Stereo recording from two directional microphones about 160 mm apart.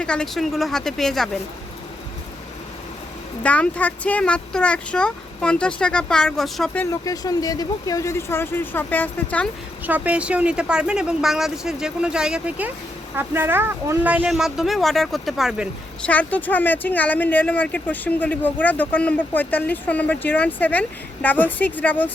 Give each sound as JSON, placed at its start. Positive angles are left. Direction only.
{"t": 0.0, "sound": "speech", "side_deg": 5}
{"t": 3.4, "sound": "speech", "side_deg": 10}
{"t": 6.9, "sound": "speech", "side_deg": 20}
{"t": 9.8, "sound": "speech", "side_deg": -10}
{"t": 16.0, "sound": "speech", "side_deg": 10}